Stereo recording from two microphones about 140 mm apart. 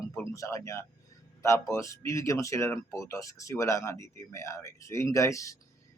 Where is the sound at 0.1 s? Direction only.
20° left (ahead or behind).